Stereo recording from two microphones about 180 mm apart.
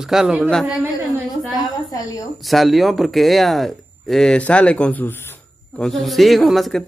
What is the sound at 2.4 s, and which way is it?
Speech, centre (ahead or behind).